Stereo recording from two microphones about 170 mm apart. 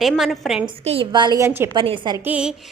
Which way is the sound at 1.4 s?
15° right (ahead or behind).